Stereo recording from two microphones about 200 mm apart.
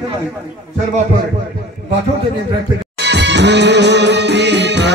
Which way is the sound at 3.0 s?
60° right (ahead or behind).